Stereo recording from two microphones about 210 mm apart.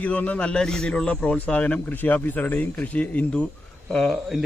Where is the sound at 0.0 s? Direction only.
5° left (ahead or behind).